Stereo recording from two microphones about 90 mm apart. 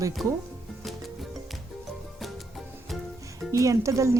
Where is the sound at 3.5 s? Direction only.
35° right (ahead or behind).